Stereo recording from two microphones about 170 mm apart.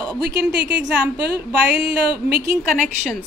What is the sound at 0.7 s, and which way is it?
Speech, 5° right (ahead or behind).